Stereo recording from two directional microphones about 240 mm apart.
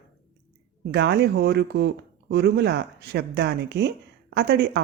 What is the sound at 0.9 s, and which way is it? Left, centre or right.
Speech, right.